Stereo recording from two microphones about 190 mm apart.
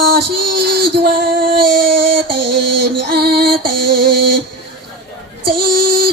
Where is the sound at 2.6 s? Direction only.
60° right (ahead or behind).